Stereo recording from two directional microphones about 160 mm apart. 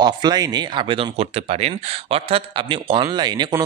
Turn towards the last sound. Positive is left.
turn(degrees=-25)  # may be behind; listen again after turning